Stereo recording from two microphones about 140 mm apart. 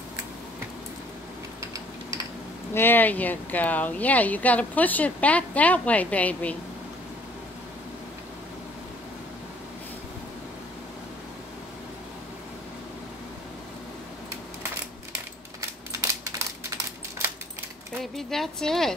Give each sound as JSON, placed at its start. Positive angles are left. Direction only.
{"t": 2.7, "sound": "speech", "side_deg": 15}
{"t": 16.0, "sound": "crushing", "side_deg": -20}
{"t": 18.0, "sound": "a woman's voice", "side_deg": 0}